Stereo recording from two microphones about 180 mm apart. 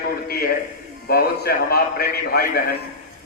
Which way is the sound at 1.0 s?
60° left (ahead or behind).